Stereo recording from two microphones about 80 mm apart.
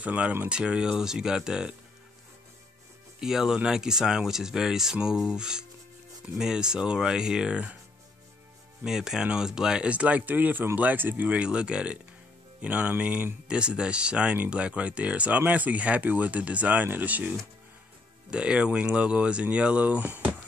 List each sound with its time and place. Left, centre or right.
0.0 s speech: centre
3.2 s speech: centre
8.8 s speech: centre
18.3 s speech: centre